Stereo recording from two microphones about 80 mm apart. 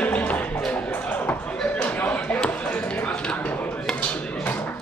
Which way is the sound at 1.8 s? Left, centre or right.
Centre.